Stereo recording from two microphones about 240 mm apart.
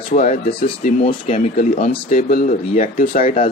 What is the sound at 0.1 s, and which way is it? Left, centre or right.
Speech, left.